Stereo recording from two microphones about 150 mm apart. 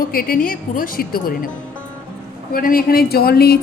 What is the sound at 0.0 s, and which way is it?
A woman's voice, 75° left (ahead or behind).